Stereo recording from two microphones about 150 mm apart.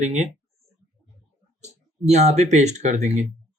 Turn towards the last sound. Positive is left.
turn(degrees=-50)  # may be behind; listen again after turning